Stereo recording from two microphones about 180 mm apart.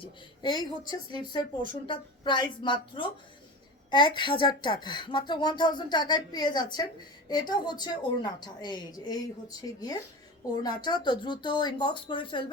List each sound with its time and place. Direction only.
0.0 s speech: 25° left (ahead or behind)